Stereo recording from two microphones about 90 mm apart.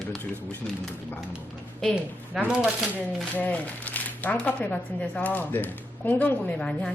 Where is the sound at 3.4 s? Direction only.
15° left (ahead or behind).